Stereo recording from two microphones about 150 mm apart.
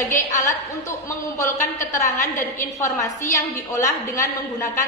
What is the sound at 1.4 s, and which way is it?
A woman's voice, 20° left (ahead or behind).